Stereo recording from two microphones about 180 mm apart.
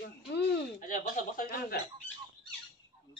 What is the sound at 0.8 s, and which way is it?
Speech, 50° left (ahead or behind).